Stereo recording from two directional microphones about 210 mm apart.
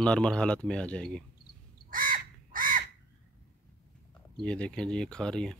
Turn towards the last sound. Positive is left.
turn(degrees=5)  # may be behind; listen again after turning